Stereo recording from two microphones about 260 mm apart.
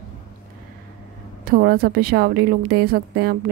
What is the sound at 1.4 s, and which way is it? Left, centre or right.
A woman's voice, right.